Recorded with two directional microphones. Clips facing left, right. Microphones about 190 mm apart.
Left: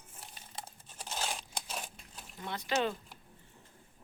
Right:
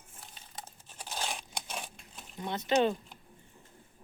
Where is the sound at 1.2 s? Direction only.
5° left (ahead or behind).